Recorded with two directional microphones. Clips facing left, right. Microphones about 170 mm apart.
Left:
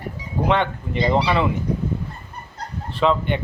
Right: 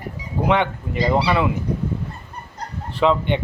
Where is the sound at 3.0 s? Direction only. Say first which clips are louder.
Right 1 dB; 15° right (ahead or behind).